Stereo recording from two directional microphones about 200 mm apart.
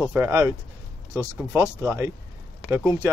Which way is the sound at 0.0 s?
10° right (ahead or behind).